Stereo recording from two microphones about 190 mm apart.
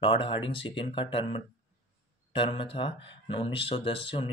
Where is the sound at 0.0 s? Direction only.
25° left (ahead or behind).